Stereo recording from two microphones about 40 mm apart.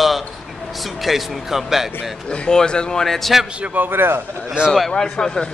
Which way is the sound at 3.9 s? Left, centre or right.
Right.